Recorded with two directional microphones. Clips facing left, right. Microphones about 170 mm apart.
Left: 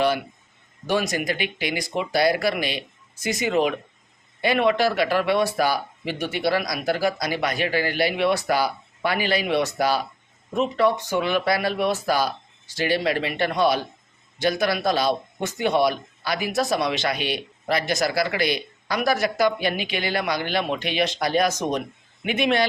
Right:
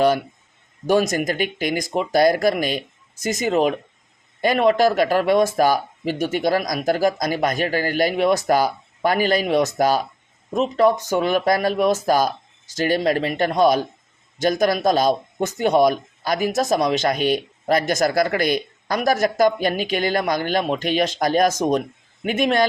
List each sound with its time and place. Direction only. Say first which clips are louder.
0.9 s a man's voice: right 5 dB; 45° right (ahead or behind)